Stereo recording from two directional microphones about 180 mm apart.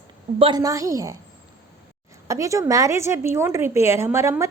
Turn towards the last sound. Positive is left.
turn(degrees=-15)  # may be behind; listen again after turning